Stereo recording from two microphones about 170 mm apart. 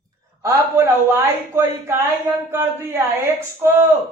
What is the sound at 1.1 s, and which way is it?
Speech, 15° right (ahead or behind).